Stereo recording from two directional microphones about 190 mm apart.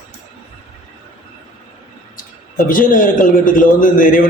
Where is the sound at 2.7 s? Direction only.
45° left (ahead or behind).